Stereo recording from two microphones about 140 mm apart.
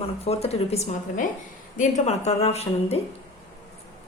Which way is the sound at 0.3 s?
45° left (ahead or behind).